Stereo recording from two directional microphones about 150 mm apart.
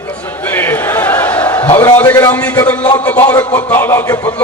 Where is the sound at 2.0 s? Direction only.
20° left (ahead or behind).